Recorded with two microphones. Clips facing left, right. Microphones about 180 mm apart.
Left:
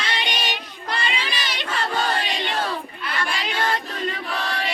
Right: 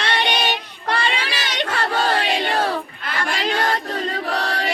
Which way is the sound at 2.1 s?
60° right (ahead or behind).